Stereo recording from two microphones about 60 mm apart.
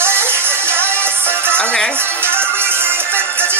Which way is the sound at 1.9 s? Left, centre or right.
Right.